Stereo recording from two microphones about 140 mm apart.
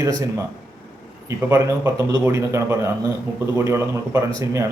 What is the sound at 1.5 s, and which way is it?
Speech, 20° right (ahead or behind).